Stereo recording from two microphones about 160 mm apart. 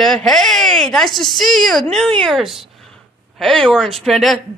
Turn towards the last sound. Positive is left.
turn(degrees=0)  # may be behind; listen again after turning